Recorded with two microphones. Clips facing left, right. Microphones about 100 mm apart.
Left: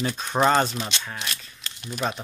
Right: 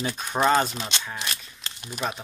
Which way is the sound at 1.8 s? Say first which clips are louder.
Left 2 dB; 15° right (ahead or behind).